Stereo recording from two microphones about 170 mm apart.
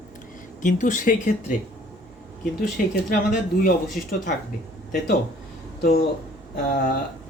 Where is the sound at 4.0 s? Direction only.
55° left (ahead or behind).